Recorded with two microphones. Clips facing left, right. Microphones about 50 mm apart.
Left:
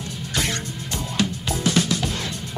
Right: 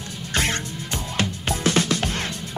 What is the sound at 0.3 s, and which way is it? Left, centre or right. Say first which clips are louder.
Music: right 2 dB; right.